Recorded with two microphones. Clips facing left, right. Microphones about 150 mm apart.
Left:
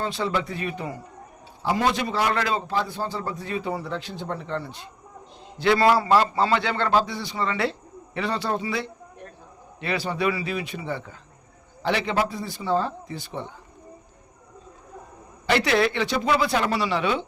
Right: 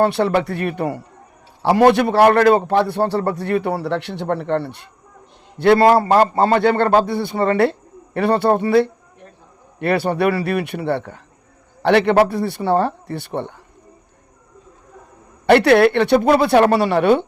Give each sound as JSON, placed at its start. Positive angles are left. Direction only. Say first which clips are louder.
{"t": 0.0, "sound": "a man's voice", "louder": "right 10 dB", "side_deg": -65}
{"t": 5.5, "sound": "a man's voice", "louder": "right 7 dB", "side_deg": -55}
{"t": 15.4, "sound": "a man's voice", "louder": "right 10 dB", "side_deg": -60}